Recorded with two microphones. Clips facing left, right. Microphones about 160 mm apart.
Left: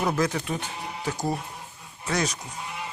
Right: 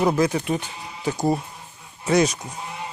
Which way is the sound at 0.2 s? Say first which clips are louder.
Right 5 dB; 15° right (ahead or behind).